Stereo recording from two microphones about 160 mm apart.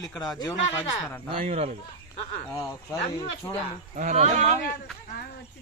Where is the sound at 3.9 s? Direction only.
50° right (ahead or behind).